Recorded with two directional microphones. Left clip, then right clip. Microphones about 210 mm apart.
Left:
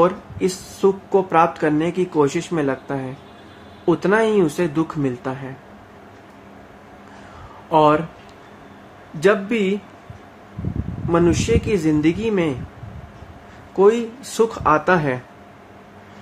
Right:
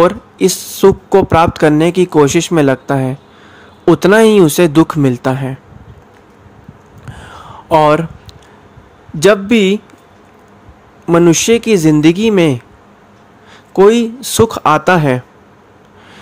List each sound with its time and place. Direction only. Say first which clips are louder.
0.0 s a woman's voice: right 7 dB; 45° right (ahead or behind)
7.7 s a woman's voice: right 6 dB; 50° right (ahead or behind)
9.2 s a woman's voice: right 8 dB; 45° right (ahead or behind)
11.1 s a woman's voice: right 9 dB; 45° right (ahead or behind)
13.7 s a woman's voice: right 7 dB; 45° right (ahead or behind)